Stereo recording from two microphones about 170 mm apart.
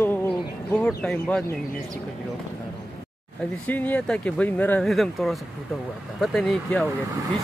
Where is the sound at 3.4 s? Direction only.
10° left (ahead or behind).